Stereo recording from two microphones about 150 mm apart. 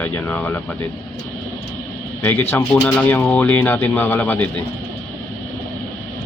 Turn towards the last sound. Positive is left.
turn(degrees=10)  # may be behind; listen again after turning